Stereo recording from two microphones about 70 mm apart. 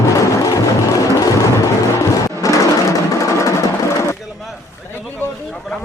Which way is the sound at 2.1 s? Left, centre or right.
Left.